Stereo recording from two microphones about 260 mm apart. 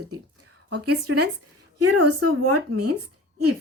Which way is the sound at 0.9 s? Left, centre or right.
Right.